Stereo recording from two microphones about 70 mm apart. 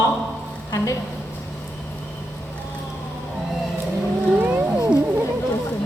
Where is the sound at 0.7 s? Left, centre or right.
Left.